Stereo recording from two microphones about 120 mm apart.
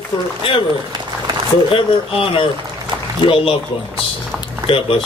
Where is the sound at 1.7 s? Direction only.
45° left (ahead or behind).